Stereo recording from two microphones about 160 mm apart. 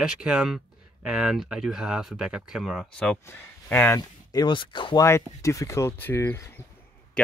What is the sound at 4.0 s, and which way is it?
Speech, 25° left (ahead or behind).